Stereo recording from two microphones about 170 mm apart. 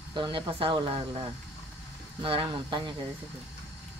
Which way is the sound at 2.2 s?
30° right (ahead or behind).